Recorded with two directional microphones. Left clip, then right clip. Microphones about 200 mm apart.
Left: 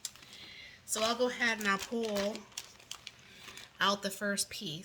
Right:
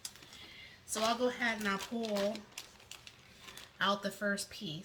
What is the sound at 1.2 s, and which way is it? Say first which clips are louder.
Speech: left 3 dB; 40° left (ahead or behind).